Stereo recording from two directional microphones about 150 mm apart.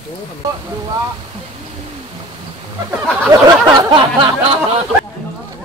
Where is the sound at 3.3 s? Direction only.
30° right (ahead or behind).